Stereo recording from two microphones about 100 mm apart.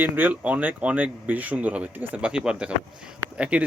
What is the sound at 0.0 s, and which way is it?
Speech, 20° right (ahead or behind).